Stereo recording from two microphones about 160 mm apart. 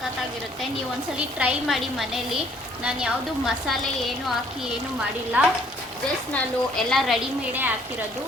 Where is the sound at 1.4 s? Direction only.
5° right (ahead or behind).